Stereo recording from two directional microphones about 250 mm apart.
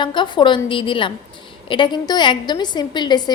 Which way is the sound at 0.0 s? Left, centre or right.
Centre.